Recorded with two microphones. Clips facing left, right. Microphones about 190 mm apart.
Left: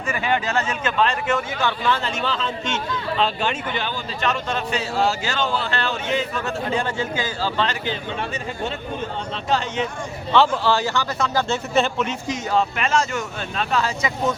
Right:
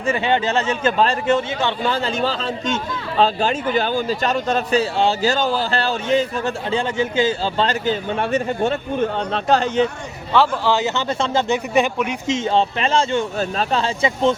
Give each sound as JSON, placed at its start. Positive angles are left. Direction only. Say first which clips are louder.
{"t": 0.1, "sound": "a man's voice", "louder": "right 4 dB", "side_deg": -25}
{"t": 8.2, "sound": "a man's voice", "louder": "right 8 dB", "side_deg": -50}
{"t": 10.3, "sound": "speech", "louder": "right 1 dB", "side_deg": -10}
{"t": 12.3, "sound": "speech", "louder": "right 5 dB", "side_deg": -30}